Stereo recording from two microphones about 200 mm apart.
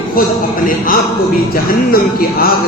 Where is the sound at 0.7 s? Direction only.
45° left (ahead or behind).